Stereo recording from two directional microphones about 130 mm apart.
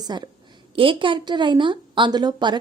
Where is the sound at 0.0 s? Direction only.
30° right (ahead or behind).